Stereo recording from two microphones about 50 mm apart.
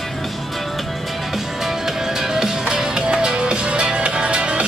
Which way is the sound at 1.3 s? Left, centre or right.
Centre.